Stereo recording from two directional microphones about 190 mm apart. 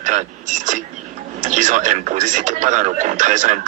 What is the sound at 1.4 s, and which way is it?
Speech, 40° right (ahead or behind).